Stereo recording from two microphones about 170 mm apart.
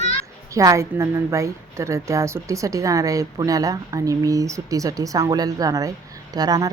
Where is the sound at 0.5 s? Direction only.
20° right (ahead or behind).